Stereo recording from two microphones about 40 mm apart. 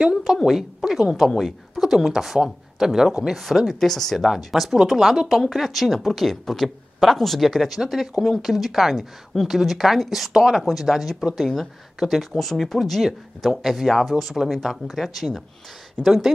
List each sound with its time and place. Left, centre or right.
0.0 s speech: centre
1.8 s a woman's voice: centre
5.3 s speech: centre
10.3 s speech: centre
10.6 s speech: centre
16.0 s speech: centre